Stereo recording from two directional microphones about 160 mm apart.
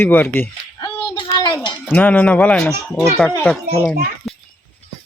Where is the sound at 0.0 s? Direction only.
10° left (ahead or behind).